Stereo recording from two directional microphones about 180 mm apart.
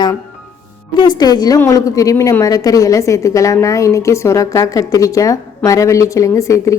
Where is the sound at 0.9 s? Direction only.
25° left (ahead or behind).